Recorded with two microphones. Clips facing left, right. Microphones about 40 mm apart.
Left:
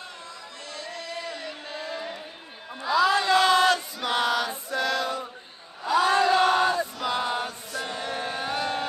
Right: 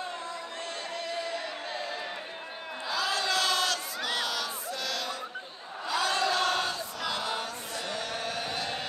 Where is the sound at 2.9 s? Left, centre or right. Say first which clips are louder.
Left 9 dB; left.